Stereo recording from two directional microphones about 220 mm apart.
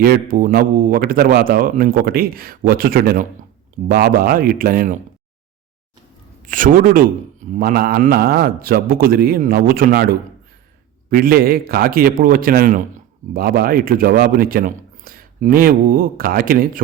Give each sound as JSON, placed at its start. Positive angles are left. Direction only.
{"t": 0.0, "sound": "a man's voice", "side_deg": -40}
{"t": 6.4, "sound": "a man's voice", "side_deg": -40}